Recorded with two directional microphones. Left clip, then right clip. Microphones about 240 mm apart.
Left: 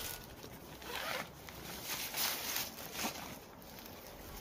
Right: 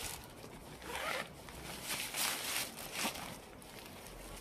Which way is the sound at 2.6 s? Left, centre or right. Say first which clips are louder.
Right 1 dB; right.